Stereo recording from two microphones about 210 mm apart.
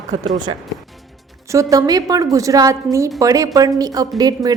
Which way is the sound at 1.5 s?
15° right (ahead or behind).